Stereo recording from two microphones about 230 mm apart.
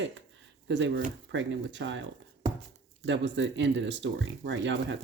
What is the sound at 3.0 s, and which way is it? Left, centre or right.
Speech, right.